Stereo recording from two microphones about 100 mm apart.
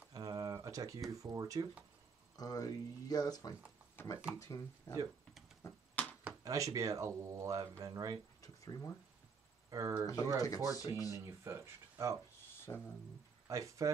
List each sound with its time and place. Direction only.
0.1 s a sound: 40° right (ahead or behind)
1.1 s speech: 35° right (ahead or behind)
2.3 s speech: 40° left (ahead or behind)
4.0 s speech: 20° left (ahead or behind)
5.7 s finger snapping: 15° left (ahead or behind)
6.4 s speech: 35° right (ahead or behind)
8.4 s a sound: 35° left (ahead or behind)
9.7 s speech: 35° right (ahead or behind)
10.3 s speech: 35° left (ahead or behind)
11.1 s speech: 30° right (ahead or behind)
12.7 s speech: 30° left (ahead or behind)
13.5 s speech: 30° right (ahead or behind)